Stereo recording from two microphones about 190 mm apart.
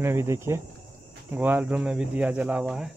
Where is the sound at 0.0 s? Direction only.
15° right (ahead or behind).